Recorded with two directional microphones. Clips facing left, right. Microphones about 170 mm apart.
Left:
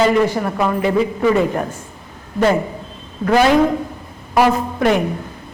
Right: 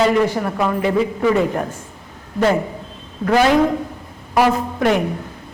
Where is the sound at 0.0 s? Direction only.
15° left (ahead or behind).